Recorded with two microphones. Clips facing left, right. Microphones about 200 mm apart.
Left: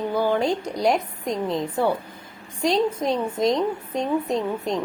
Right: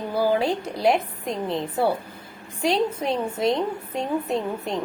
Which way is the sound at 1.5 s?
35° right (ahead or behind).